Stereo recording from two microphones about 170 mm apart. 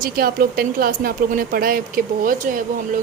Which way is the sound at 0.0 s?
60° right (ahead or behind).